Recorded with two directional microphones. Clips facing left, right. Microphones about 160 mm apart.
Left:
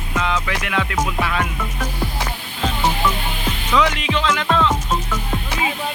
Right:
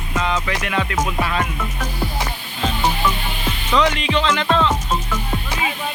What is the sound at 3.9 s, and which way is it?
Speech, 10° left (ahead or behind).